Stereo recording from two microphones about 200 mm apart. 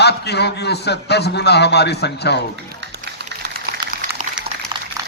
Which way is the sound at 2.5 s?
55° right (ahead or behind).